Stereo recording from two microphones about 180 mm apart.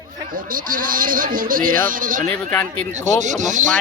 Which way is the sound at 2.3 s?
10° left (ahead or behind).